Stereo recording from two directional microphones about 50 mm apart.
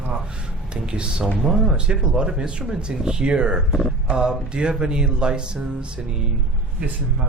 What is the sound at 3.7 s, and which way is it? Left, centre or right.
Speech, centre.